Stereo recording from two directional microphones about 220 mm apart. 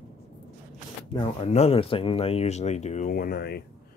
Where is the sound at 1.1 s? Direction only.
30° left (ahead or behind).